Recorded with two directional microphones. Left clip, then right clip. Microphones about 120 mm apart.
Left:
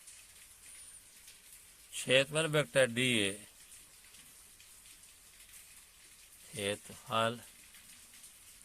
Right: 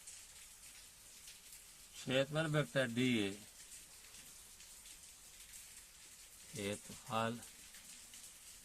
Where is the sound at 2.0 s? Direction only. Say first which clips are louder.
Left 7 dB; 55° left (ahead or behind).